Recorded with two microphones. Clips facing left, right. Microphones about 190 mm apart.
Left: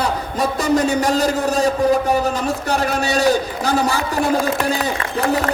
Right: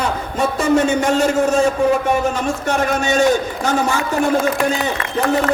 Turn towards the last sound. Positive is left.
turn(degrees=35)  # may be behind; listen again after turning